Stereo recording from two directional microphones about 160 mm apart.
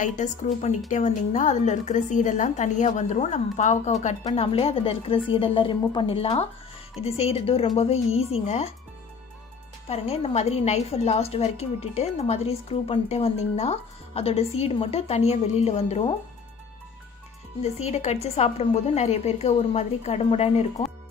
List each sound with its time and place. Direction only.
0.0 s a woman's voice: 50° left (ahead or behind)
9.9 s a woman's voice: 40° left (ahead or behind)
17.6 s a woman's voice: 45° left (ahead or behind)